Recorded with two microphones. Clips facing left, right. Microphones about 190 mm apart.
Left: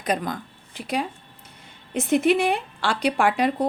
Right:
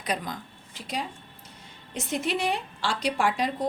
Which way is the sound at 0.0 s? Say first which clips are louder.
Left 6 dB; 50° left (ahead or behind).